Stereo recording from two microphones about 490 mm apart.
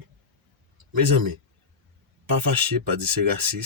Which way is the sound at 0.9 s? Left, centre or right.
Right.